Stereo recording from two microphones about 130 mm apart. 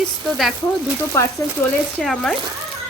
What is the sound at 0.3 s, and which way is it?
Speech, centre (ahead or behind).